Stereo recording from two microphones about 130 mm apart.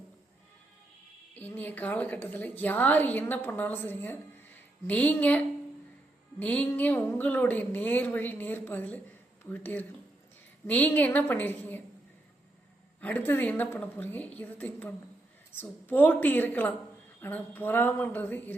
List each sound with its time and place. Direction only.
1.3 s a woman's voice: 15° left (ahead or behind)
6.4 s a woman's voice: 10° left (ahead or behind)
13.0 s a woman's voice: 10° left (ahead or behind)